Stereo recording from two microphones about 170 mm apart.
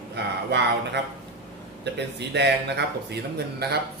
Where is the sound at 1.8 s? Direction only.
80° right.